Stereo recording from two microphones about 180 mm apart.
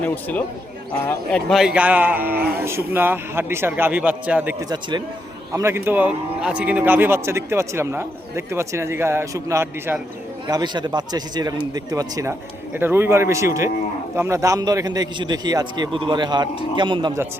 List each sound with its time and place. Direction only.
0.0 s a man's voice: 10° left (ahead or behind); by 4.5 s 10° right (ahead or behind)
4.7 s a man's voice: 25° right (ahead or behind)